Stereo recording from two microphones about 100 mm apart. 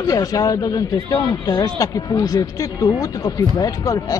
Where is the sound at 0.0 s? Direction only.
35° left (ahead or behind).